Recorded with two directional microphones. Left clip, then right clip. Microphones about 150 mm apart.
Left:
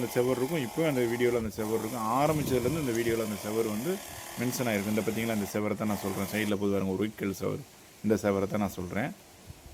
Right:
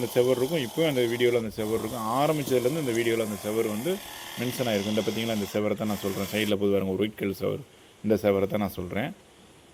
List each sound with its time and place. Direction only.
0.1 s speech: centre (ahead or behind)